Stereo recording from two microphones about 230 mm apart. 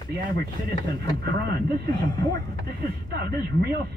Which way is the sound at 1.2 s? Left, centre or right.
Right.